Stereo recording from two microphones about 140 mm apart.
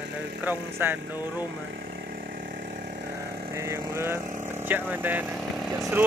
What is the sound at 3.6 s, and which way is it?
Speech, 20° right (ahead or behind).